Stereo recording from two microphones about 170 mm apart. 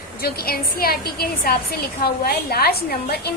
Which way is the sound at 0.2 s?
65° left (ahead or behind).